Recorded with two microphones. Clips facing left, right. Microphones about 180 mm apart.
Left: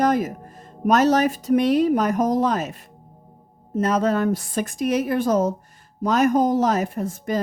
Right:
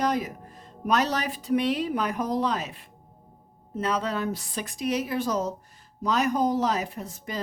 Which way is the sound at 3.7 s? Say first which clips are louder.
Left 7 dB; 45° left (ahead or behind).